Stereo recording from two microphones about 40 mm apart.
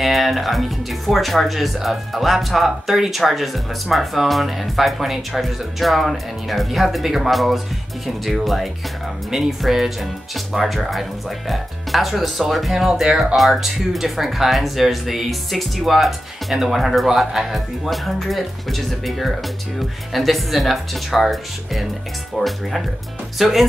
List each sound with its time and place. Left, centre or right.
0.0 s speech: centre